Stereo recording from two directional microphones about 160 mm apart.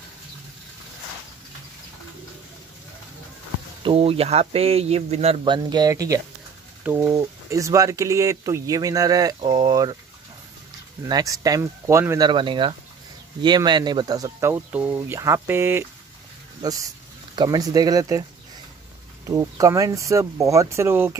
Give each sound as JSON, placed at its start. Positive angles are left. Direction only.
{"t": 3.8, "sound": "speech", "side_deg": -35}
{"t": 6.8, "sound": "mechanisms", "side_deg": -10}
{"t": 7.1, "sound": "speech", "side_deg": -20}
{"t": 11.1, "sound": "speech", "side_deg": -25}
{"t": 12.3, "sound": "speech", "side_deg": -30}
{"t": 19.2, "sound": "speech", "side_deg": -20}